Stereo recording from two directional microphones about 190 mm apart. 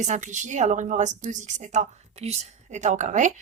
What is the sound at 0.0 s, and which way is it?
Speech, 40° right (ahead or behind).